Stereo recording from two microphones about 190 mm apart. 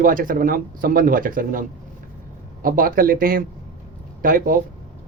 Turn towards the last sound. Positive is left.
turn(degrees=-45)  # may be behind; listen again after turning